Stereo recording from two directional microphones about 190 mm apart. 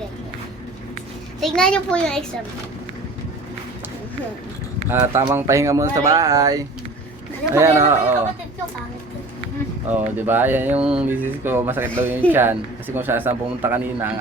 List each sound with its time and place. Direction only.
1.4 s a child's voice: 5° left (ahead or behind)
4.9 s speech: 15° right (ahead or behind)
9.9 s speech: 10° right (ahead or behind)